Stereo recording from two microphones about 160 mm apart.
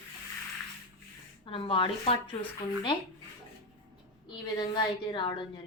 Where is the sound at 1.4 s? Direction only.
30° left (ahead or behind).